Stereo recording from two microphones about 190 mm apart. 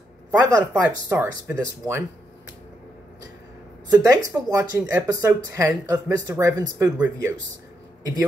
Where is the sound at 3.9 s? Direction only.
20° right (ahead or behind).